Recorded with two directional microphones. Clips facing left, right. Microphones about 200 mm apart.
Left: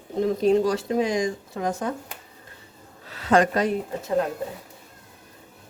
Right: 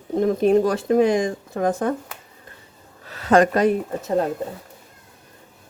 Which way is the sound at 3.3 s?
50° right (ahead or behind).